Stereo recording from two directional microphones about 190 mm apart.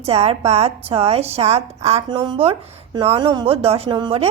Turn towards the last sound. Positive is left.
turn(degrees=-30)  # may be behind; listen again after turning